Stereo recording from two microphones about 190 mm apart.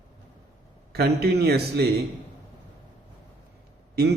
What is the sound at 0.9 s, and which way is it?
Speech, 55° right (ahead or behind).